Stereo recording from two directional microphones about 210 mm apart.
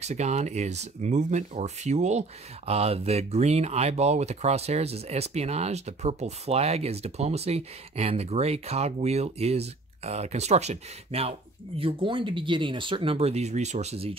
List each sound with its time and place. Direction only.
0.0 s speech: 30° right (ahead or behind)